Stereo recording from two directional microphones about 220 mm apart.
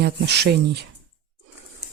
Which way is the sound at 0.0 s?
50° right (ahead or behind).